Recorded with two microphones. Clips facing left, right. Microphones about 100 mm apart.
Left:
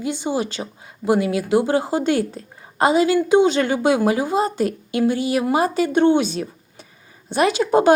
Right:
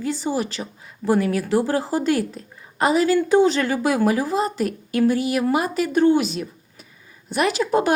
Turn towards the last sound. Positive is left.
turn(degrees=25)  # may be behind; listen again after turning